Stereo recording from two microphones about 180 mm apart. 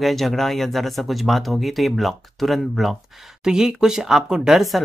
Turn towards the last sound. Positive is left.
turn(degrees=0)  # may be behind; listen again after turning